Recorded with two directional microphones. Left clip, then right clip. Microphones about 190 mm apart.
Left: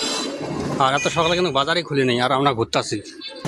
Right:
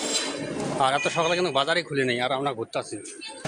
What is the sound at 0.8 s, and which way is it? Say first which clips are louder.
Speech: left 4 dB; 5° left (ahead or behind).